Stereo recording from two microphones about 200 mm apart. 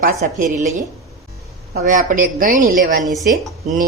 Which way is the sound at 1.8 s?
40° right (ahead or behind).